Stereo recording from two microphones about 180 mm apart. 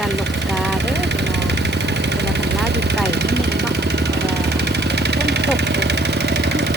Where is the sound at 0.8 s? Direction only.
70° right (ahead or behind).